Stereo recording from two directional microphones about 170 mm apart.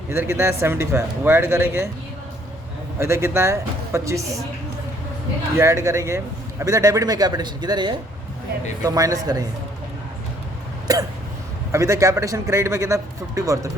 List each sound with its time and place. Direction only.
0.1 s speech: 15° right (ahead or behind)
3.0 s speech: 15° right (ahead or behind)
5.5 s a man's voice: 15° right (ahead or behind)
11.7 s a man's voice: 20° right (ahead or behind)